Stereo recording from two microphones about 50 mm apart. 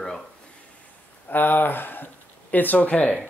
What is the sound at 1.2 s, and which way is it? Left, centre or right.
Speech, left.